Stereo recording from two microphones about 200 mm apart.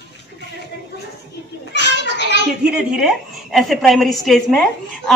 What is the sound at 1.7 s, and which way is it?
Children playing, 60° left (ahead or behind).